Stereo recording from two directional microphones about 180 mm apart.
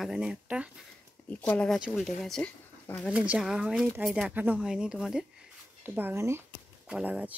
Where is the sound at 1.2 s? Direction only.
10° left (ahead or behind).